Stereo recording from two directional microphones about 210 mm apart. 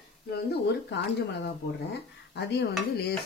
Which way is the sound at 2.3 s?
55° left (ahead or behind).